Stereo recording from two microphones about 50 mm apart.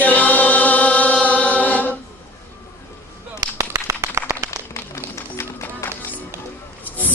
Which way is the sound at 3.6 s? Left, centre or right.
Right.